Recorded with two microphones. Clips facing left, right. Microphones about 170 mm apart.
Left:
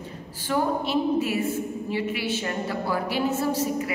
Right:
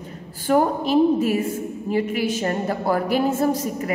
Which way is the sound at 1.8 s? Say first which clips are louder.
Right 8 dB; 45° right (ahead or behind).